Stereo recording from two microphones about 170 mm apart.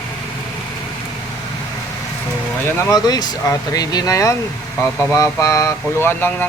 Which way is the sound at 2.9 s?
20° left (ahead or behind).